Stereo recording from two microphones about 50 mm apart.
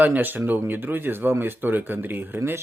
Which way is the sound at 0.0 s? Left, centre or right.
Right.